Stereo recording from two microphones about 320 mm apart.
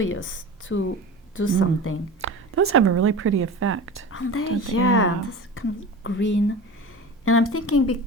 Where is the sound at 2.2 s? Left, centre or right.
Right.